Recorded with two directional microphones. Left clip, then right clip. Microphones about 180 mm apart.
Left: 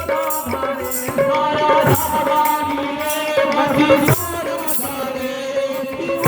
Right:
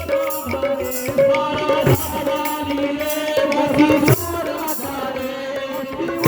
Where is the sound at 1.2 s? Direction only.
20° left (ahead or behind).